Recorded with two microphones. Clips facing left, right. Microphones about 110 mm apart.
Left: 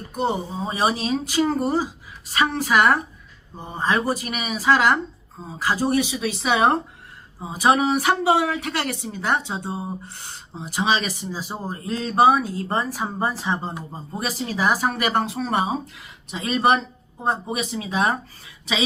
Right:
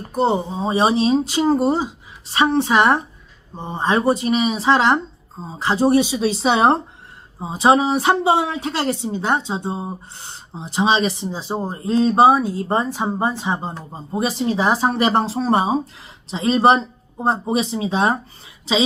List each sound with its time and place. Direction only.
0.1 s speech: 30° right (ahead or behind)